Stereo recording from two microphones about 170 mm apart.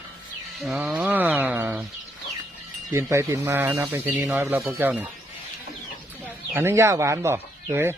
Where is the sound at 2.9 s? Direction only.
15° right (ahead or behind).